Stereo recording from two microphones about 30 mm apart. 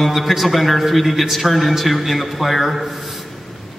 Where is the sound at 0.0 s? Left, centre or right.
Centre.